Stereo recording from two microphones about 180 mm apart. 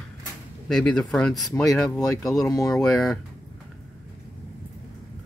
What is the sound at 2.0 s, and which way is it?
Speech, 20° left (ahead or behind).